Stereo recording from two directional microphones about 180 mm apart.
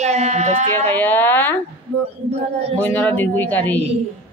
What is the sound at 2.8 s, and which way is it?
Speech, 10° left (ahead or behind).